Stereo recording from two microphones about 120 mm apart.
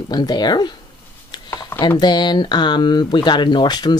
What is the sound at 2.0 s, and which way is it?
Speech, 35° left (ahead or behind).